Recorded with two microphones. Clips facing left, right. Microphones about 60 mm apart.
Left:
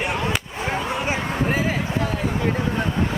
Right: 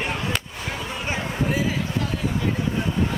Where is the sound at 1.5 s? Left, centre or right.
Left.